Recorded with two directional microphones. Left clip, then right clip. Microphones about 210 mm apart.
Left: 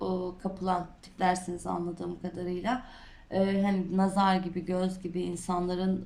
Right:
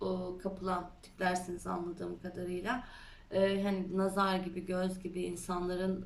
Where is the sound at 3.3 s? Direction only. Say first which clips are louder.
Left 2 dB; 30° left (ahead or behind).